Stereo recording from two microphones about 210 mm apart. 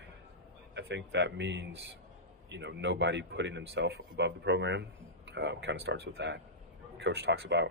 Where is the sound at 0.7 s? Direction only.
55° right (ahead or behind).